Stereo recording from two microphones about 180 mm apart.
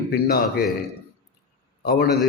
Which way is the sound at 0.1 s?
60° left (ahead or behind).